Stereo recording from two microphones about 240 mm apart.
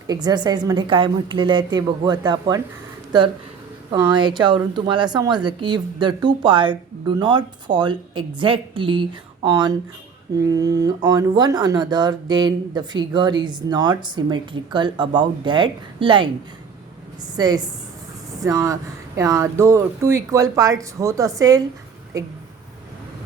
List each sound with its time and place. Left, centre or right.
0.1 s speech: centre
17.3 s speech: centre